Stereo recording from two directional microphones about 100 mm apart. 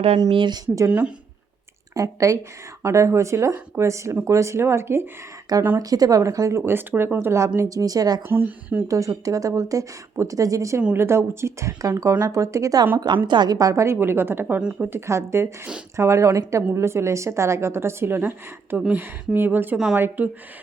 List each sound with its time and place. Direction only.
0.3 s speech: 55° right (ahead or behind)
0.9 s speech: 15° right (ahead or behind)
1.9 s a woman's voice: 35° right (ahead or behind)
5.8 s speech: 40° right (ahead or behind)
6.7 s a woman's voice: 20° right (ahead or behind); by 8.2 s 40° right (ahead or behind)
8.3 s a woman's voice: 20° right (ahead or behind)
8.9 s a woman's voice: 35° right (ahead or behind)
13.2 s a woman's voice: 45° right (ahead or behind); by 19.6 s 20° right (ahead or behind)
19.7 s speech: 5° right (ahead or behind)
20.0 s speech: 20° right (ahead or behind)